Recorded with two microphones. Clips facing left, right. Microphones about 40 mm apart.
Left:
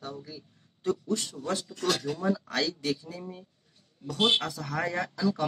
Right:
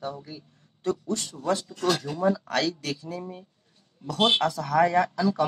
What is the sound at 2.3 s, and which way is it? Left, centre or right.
Speech, right.